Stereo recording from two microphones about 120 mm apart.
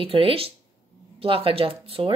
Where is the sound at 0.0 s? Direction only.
50° right (ahead or behind).